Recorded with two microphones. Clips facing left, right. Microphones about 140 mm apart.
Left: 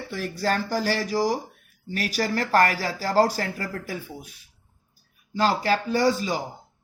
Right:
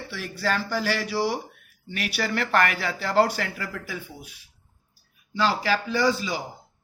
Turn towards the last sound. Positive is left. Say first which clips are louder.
# left 2 dB
turn(degrees=45)  # may be behind; listen again after turning